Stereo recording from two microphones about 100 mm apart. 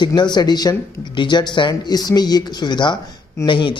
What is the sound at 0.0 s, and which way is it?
Speech, 50° left (ahead or behind).